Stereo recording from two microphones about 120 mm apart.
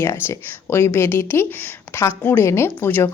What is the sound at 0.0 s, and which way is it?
Speech, 20° left (ahead or behind).